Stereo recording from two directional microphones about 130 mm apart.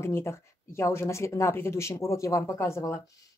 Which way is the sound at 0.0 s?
20° left (ahead or behind).